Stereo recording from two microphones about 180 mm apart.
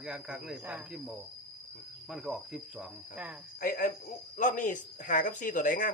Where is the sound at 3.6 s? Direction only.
50° left (ahead or behind).